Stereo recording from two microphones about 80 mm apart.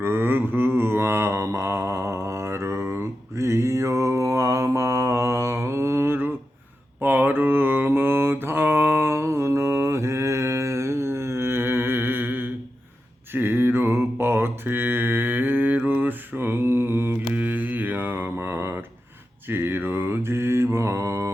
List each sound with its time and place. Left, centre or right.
0.0 s mantra: right